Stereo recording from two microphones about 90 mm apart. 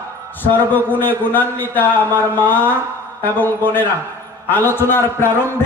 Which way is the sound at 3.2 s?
20° left (ahead or behind).